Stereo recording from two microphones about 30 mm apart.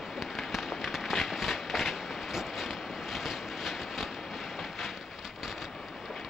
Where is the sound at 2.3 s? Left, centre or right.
Centre.